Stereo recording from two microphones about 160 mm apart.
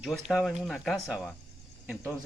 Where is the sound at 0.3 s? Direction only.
Centre (ahead or behind).